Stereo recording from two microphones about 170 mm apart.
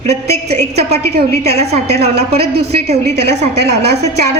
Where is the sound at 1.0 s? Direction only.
70° right (ahead or behind).